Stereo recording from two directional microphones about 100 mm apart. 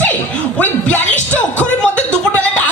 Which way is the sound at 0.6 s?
15° left (ahead or behind).